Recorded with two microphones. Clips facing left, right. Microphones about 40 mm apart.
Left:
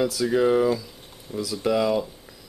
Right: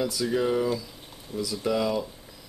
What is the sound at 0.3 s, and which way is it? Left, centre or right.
Speech, centre.